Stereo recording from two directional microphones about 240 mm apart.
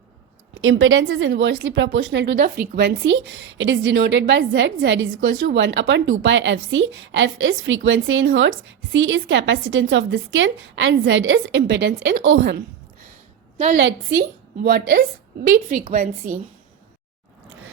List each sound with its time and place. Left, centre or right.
0.6 s a woman's voice: right
13.7 s a woman's voice: right
15.8 s a woman's voice: right